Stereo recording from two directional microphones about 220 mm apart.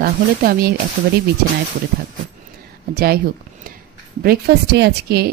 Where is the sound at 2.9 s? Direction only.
45° right (ahead or behind).